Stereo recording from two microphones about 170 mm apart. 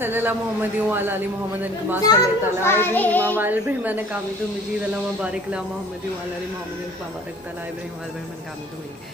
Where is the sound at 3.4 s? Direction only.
10° right (ahead or behind).